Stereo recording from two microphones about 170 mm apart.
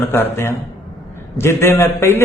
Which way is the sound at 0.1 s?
15° left (ahead or behind).